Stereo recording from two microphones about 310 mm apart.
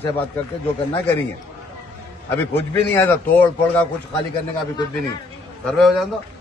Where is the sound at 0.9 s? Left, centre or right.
Centre.